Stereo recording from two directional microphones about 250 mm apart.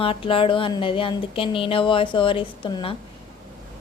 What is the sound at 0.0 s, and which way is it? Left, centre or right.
A woman's voice, left.